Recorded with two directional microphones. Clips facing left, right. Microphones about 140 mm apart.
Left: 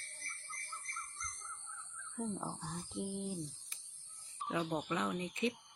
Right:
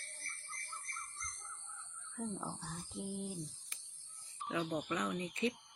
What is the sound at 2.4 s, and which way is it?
Speech, 20° left (ahead or behind).